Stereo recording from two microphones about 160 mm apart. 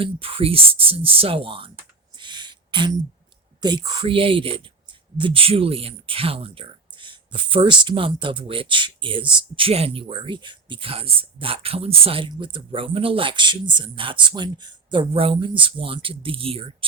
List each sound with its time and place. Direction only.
0.0 s speech: 35° right (ahead or behind)
2.1 s a sound: 30° right (ahead or behind)
3.6 s speech: 25° right (ahead or behind)